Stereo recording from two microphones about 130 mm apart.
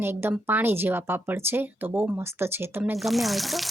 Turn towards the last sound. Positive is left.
turn(degrees=0)  # may be behind; listen again after turning